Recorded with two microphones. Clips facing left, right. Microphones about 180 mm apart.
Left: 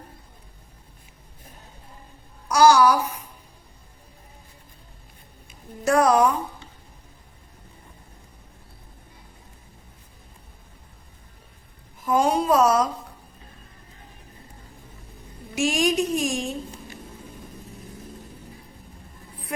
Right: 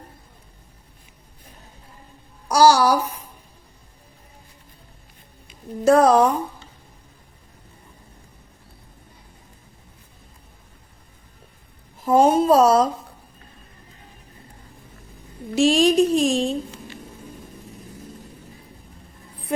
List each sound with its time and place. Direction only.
2.5 s speech: 35° right (ahead or behind)
5.8 s a woman's voice: 30° right (ahead or behind)
12.0 s speech: 25° right (ahead or behind)
15.5 s a woman's voice: 30° right (ahead or behind)